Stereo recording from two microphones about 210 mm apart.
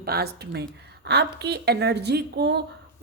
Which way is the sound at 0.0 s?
45° right (ahead or behind).